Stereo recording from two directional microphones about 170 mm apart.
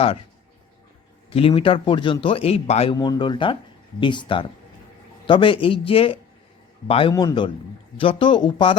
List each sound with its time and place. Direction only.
1.3 s a man's voice: 35° left (ahead or behind)
2.9 s a man's voice: 25° left (ahead or behind)
7.1 s a man's voice: 20° left (ahead or behind)